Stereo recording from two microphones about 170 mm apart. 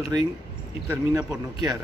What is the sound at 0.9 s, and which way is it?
Speech, 20° right (ahead or behind).